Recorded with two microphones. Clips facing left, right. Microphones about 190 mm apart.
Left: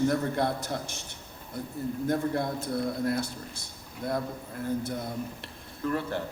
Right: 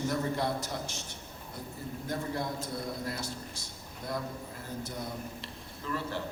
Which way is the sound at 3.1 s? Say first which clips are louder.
Left 8 dB; 55° left (ahead or behind).